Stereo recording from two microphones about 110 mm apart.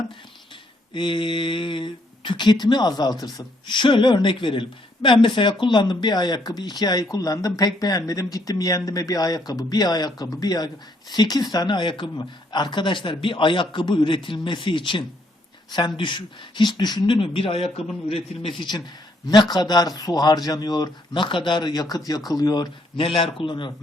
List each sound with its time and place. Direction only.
0.9 s speech: 45° left (ahead or behind)
17.2 s a man's voice: 55° left (ahead or behind)
19.3 s speech: 40° left (ahead or behind)
23.0 s speech: 55° left (ahead or behind)